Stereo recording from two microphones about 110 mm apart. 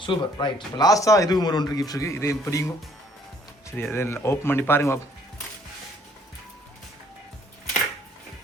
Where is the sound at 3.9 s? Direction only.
25° left (ahead or behind).